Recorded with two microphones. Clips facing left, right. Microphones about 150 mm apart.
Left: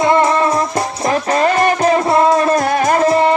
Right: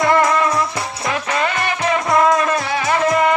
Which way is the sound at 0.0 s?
25° left (ahead or behind).